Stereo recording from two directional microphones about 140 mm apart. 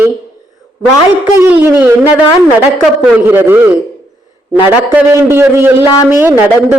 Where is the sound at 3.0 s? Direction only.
10° right (ahead or behind).